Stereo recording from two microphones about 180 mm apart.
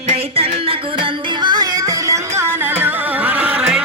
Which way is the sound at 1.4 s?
25° right (ahead or behind).